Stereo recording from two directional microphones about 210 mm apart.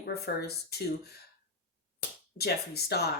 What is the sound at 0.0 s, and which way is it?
Speech, 50° left (ahead or behind).